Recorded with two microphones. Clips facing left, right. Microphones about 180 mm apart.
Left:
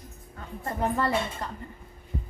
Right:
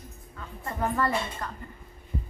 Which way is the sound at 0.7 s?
25° left (ahead or behind).